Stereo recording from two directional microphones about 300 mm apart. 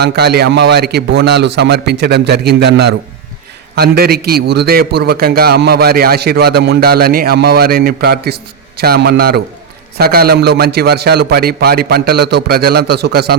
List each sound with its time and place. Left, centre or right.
0.0 s a man's voice: right